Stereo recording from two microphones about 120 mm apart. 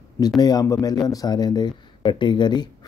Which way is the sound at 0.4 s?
30° left (ahead or behind).